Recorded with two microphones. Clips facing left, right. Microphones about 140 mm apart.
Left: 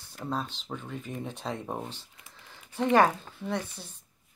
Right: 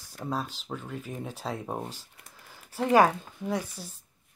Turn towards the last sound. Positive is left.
turn(degrees=-10)  # may be behind; listen again after turning